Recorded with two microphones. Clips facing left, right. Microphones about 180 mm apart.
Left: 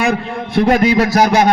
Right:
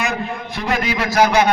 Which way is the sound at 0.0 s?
55° left (ahead or behind).